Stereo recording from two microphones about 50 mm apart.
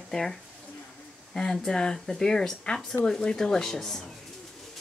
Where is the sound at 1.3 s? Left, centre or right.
Centre.